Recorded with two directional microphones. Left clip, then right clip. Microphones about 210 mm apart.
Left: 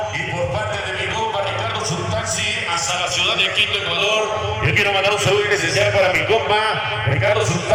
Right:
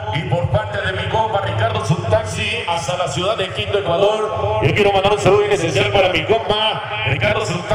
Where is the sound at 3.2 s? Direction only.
35° right (ahead or behind).